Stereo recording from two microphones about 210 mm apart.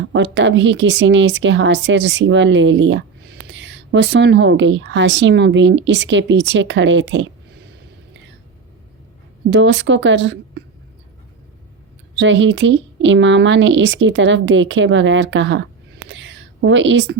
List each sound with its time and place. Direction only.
0.1 s speech: 60° right (ahead or behind)
9.5 s speech: 60° right (ahead or behind)
12.2 s speech: 60° right (ahead or behind)
16.0 s a sound: 60° right (ahead or behind)